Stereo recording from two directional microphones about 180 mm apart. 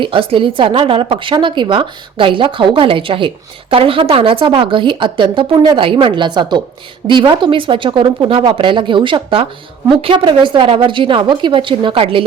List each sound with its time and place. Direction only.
0.0 s a woman's voice: 30° right (ahead or behind)